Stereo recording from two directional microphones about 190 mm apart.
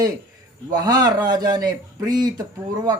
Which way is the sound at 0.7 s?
20° right (ahead or behind).